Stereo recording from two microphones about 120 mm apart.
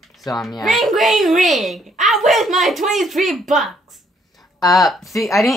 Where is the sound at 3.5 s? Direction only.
Centre (ahead or behind).